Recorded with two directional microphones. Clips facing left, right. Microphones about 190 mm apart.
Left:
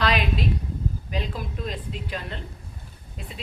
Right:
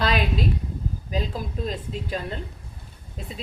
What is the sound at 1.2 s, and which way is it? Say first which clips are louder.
A woman's voice: right 3 dB; 40° right (ahead or behind).